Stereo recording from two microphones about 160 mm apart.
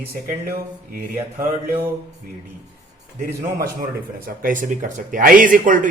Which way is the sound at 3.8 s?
60° right (ahead or behind).